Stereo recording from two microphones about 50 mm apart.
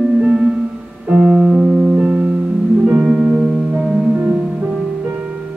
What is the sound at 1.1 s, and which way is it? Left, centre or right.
Piano, right.